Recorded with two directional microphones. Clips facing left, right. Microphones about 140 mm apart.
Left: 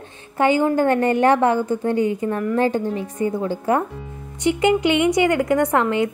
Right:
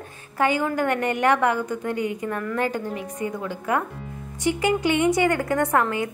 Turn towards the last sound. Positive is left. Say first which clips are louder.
# left 4 dB
turn(degrees=25)  # may be behind; listen again after turning